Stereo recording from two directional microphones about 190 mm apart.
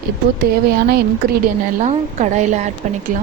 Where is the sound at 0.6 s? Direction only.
55° right (ahead or behind).